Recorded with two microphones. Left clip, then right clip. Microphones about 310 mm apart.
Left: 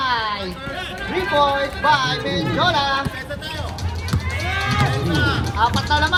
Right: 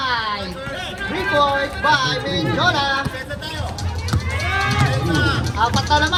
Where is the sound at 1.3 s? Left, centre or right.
Left.